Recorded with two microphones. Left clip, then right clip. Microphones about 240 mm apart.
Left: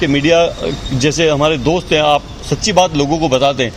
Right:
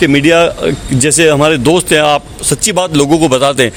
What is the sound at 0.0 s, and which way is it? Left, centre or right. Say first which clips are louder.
Speech: right 4 dB; right.